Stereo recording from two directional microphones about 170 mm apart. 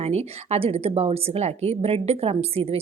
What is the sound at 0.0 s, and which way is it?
A woman's voice, 40° right (ahead or behind).